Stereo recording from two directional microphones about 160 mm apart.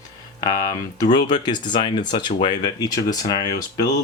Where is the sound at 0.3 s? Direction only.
25° left (ahead or behind).